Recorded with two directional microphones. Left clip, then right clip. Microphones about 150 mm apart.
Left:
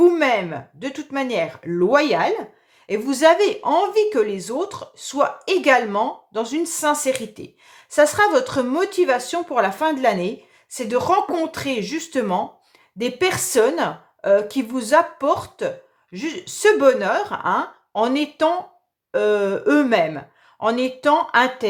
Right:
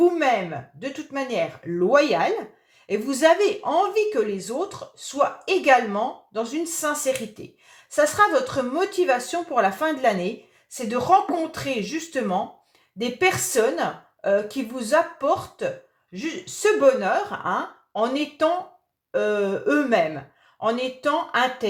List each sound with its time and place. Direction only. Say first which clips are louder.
0.0 s speech: left 4 dB; 40° left (ahead or behind)
10.8 s speech: left 1 dB; 45° left (ahead or behind)